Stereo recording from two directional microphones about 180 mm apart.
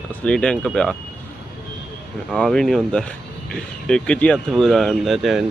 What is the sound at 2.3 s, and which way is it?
Speech, 5° left (ahead or behind).